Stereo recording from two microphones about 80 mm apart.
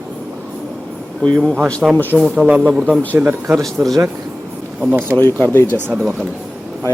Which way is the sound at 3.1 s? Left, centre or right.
Right.